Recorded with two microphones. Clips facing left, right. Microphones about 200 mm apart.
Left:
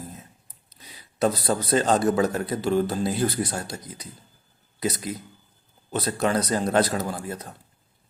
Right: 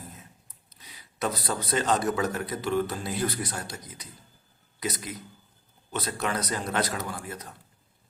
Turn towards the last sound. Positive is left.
turn(degrees=30)  # may be behind; listen again after turning